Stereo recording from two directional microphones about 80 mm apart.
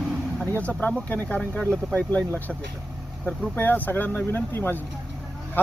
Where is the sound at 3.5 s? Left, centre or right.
Left.